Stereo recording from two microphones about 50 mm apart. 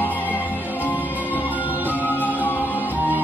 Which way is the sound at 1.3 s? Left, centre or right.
Right.